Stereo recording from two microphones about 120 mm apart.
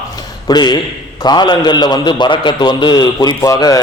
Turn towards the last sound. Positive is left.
turn(degrees=30)  # may be behind; listen again after turning